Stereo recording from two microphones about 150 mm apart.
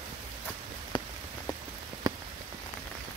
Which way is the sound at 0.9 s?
30° left (ahead or behind).